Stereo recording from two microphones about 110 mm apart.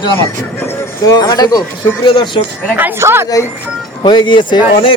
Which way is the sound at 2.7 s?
20° right (ahead or behind).